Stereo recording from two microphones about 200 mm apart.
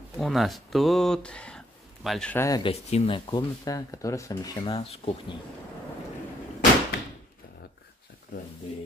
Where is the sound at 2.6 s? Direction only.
30° left (ahead or behind).